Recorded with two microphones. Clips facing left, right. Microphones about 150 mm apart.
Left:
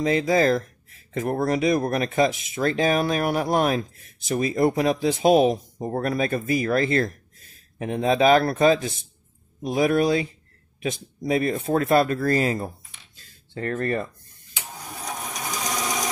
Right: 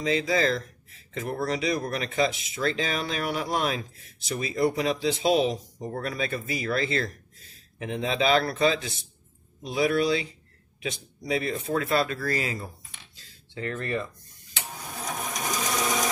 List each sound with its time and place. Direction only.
0.0 s speech: 45° left (ahead or behind)